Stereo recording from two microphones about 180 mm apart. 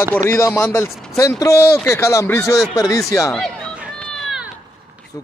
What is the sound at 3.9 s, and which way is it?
Run, 5° left (ahead or behind).